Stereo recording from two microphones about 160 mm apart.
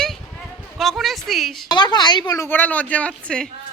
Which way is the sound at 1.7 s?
25° left (ahead or behind).